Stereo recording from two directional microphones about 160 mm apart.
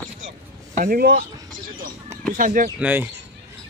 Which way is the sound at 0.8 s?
65° right (ahead or behind).